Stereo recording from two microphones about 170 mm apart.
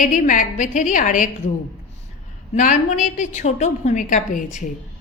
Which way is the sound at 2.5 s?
45° left (ahead or behind).